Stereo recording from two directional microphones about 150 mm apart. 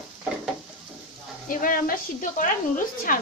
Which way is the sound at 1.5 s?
70° left (ahead or behind).